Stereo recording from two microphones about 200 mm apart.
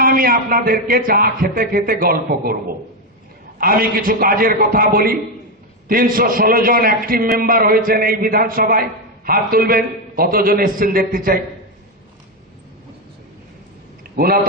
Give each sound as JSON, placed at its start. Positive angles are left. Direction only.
{"t": 0.0, "sound": "a man's voice", "side_deg": -45}
{"t": 3.6, "sound": "a man's voice", "side_deg": -45}
{"t": 14.0, "sound": "a sound", "side_deg": -50}